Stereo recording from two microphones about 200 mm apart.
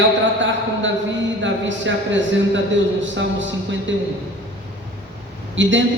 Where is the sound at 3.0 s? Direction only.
65° right (ahead or behind).